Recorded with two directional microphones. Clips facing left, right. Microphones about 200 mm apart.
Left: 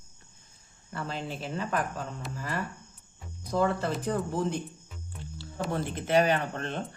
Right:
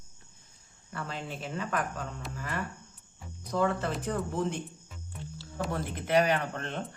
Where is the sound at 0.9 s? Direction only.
30° left (ahead or behind).